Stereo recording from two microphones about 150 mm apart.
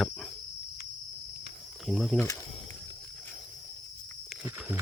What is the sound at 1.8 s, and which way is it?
Speech, centre (ahead or behind).